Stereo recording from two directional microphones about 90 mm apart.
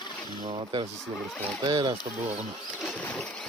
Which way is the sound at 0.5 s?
70° right (ahead or behind).